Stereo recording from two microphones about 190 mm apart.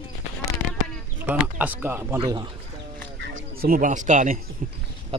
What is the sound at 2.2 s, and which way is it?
Speech, 25° right (ahead or behind).